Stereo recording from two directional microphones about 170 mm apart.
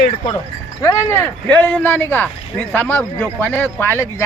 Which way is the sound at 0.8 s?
20° left (ahead or behind).